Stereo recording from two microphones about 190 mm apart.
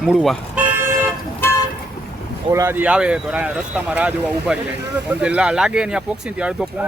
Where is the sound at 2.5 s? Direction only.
15° right (ahead or behind).